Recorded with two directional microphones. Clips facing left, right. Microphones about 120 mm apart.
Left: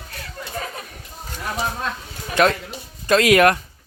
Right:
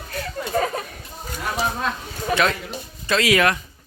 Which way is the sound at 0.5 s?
50° right (ahead or behind).